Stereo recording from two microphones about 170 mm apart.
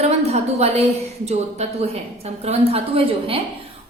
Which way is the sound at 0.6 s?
35° right (ahead or behind).